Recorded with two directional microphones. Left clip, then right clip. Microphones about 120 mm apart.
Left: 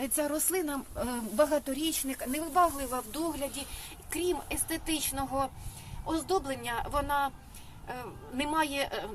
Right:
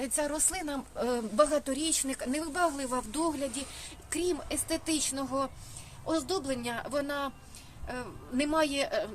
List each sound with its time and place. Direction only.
0.0 s a woman's voice: 20° right (ahead or behind); by 3.4 s 50° right (ahead or behind)
3.5 s speech: 30° right (ahead or behind)
6.1 s a woman's voice: 40° right (ahead or behind)